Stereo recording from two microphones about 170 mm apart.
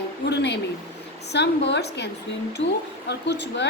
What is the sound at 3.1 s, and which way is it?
Speech, 90° left.